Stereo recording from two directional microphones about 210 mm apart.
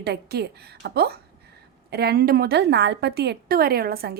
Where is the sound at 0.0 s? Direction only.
50° right (ahead or behind).